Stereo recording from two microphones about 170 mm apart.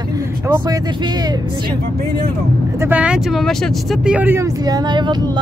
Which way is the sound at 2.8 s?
10° right (ahead or behind).